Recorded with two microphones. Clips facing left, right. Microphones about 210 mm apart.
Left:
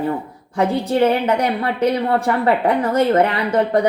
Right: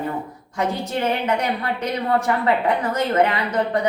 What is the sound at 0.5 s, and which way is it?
A woman's voice, 35° left (ahead or behind).